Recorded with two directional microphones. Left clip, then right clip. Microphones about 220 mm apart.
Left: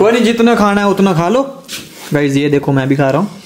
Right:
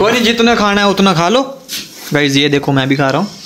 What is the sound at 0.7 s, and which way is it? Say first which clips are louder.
Speech: right 1 dB; 5° left (ahead or behind).